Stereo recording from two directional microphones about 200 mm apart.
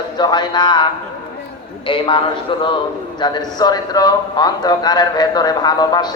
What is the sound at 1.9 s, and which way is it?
A man's voice, 25° left (ahead or behind).